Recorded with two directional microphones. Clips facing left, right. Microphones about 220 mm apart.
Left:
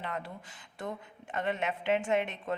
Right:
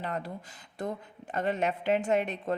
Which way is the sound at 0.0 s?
40° right (ahead or behind).